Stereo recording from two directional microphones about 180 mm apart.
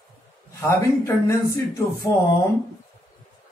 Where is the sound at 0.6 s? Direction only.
15° left (ahead or behind).